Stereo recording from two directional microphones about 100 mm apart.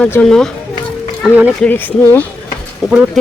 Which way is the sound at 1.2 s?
10° right (ahead or behind).